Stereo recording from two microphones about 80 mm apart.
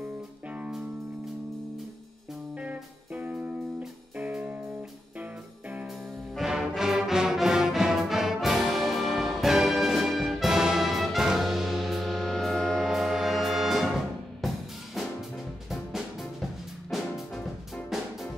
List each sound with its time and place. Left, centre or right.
2.6 s music: centre
6.3 s music: centre